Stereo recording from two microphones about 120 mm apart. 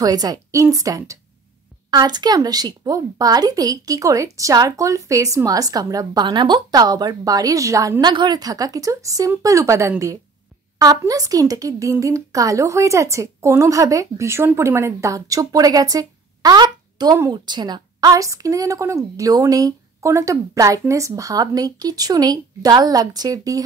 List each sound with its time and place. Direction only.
0.0 s a woman's voice: 30° right (ahead or behind)